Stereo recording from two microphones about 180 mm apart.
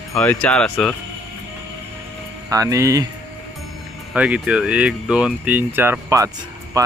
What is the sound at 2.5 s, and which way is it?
Speech, 20° right (ahead or behind).